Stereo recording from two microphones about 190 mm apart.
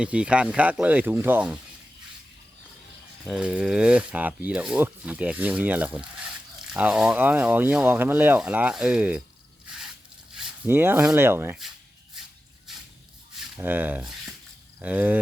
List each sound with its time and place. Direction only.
0.0 s speech: 5° right (ahead or behind)
3.2 s speech: 5° right (ahead or behind)
9.6 s a sound: centre (ahead or behind)
10.3 s speech: 5° right (ahead or behind)
13.3 s speech: 5° right (ahead or behind)